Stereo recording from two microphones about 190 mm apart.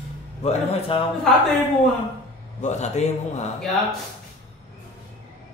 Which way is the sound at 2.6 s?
35° left (ahead or behind).